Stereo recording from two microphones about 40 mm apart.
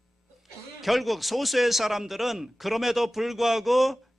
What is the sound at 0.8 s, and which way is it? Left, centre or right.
A man's voice, centre.